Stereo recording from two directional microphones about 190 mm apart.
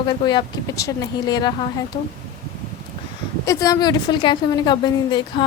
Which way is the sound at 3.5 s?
15° left (ahead or behind).